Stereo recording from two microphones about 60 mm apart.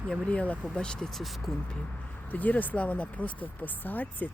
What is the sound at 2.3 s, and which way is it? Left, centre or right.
Speech, left.